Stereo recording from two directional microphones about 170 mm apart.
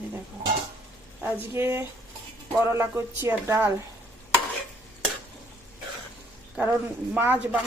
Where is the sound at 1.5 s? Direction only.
15° right (ahead or behind).